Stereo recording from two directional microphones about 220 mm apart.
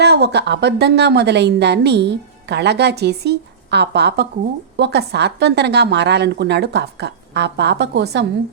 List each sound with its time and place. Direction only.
0.0 s a woman's voice: 50° right (ahead or behind)